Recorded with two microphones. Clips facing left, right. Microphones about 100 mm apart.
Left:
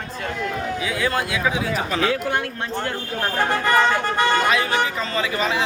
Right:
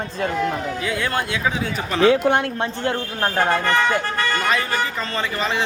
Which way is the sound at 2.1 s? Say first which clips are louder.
Right 6 dB; 25° right (ahead or behind).